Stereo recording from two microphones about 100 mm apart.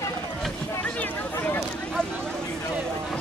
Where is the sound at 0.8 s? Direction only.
20° left (ahead or behind).